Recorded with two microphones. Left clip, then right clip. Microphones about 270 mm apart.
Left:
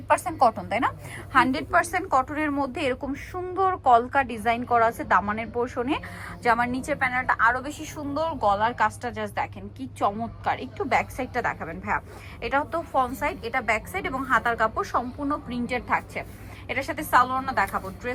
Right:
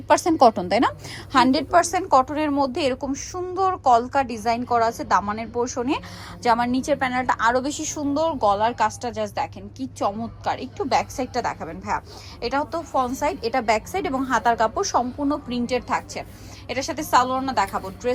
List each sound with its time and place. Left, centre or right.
0.3 s a woman's voice: right